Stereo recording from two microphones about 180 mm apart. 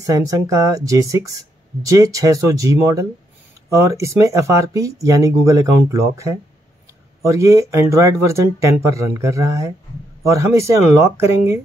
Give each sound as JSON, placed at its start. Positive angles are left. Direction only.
{"t": 0.0, "sound": "speech", "side_deg": -20}